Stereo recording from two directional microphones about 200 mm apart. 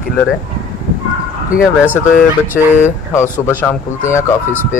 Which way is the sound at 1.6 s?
5° right (ahead or behind).